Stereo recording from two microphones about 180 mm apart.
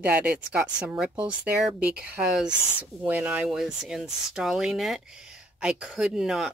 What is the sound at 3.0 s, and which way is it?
Speech, 10° right (ahead or behind).